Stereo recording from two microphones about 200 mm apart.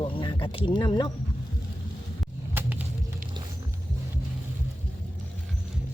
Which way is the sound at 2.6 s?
10° right (ahead or behind).